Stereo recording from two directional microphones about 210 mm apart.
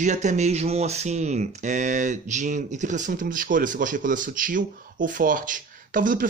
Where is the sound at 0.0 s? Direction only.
35° right (ahead or behind).